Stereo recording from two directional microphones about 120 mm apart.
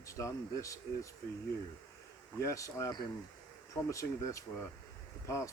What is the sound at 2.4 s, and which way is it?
Speech, 25° left (ahead or behind).